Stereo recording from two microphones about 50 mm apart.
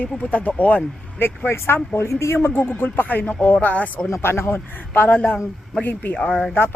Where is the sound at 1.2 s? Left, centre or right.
Left.